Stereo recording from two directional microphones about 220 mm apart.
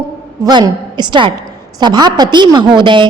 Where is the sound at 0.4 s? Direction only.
20° right (ahead or behind).